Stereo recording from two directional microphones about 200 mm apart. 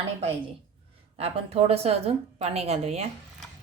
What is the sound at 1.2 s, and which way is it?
A woman's voice, 30° right (ahead or behind).